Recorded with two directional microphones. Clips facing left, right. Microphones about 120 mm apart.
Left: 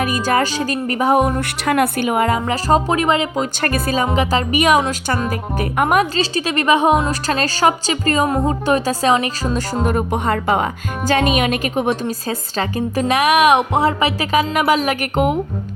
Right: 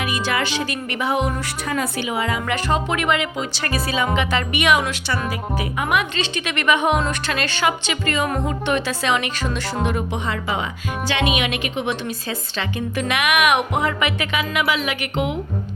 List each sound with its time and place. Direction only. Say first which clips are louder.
0.0 s speech: left 6 dB; 45° left (ahead or behind)
1.6 s speech: left 8 dB; 65° left (ahead or behind); by 2.4 s 50° left (ahead or behind)
2.5 s a woman's voice: left 5 dB; 35° left (ahead or behind)
3.6 s a woman's voice: left 3 dB; 50° left (ahead or behind)